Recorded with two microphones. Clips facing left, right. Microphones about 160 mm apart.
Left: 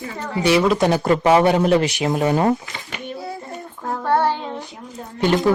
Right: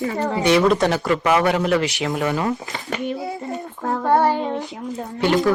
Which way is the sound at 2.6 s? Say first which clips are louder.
Right 6 dB; 40° right (ahead or behind).